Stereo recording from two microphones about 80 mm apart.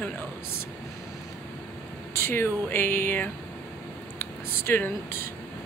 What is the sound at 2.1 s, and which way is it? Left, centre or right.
Speech, left.